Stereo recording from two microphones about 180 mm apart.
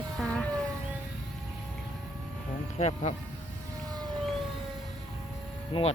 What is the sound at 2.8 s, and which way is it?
Speech, 40° left (ahead or behind).